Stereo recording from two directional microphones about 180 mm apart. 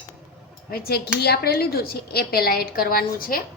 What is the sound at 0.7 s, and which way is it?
A woman's voice, 60° left (ahead or behind).